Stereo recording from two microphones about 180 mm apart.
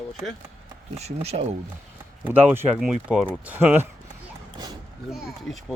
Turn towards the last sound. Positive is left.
turn(degrees=0)  # may be behind; listen again after turning